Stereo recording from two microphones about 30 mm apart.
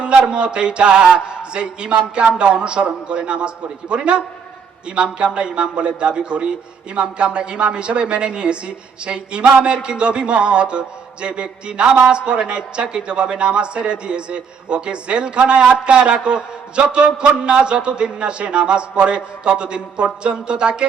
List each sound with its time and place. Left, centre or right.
0.0 s a woman's voice: right